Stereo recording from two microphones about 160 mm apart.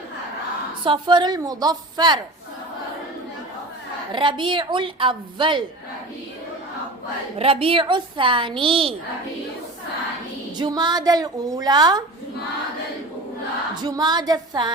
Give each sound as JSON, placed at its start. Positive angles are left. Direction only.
{"t": 0.9, "sound": "a woman's voice", "side_deg": -30}
{"t": 4.1, "sound": "a woman's voice", "side_deg": -30}
{"t": 7.3, "sound": "a woman's voice", "side_deg": -35}
{"t": 10.6, "sound": "a woman's voice", "side_deg": -25}
{"t": 13.8, "sound": "a woman's voice", "side_deg": -25}